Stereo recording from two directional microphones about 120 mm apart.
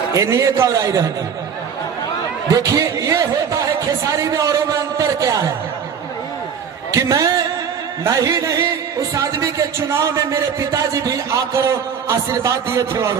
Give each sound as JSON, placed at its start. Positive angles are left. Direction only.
{"t": 0.1, "sound": "speech", "side_deg": -25}
{"t": 2.5, "sound": "a man's voice", "side_deg": -30}
{"t": 6.9, "sound": "speech", "side_deg": -30}